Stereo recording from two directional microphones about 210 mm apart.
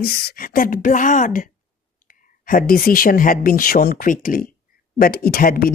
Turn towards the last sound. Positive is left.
turn(degrees=45)  # may be behind; listen again after turning